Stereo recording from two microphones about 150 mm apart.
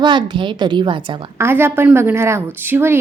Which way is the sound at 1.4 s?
15° right (ahead or behind).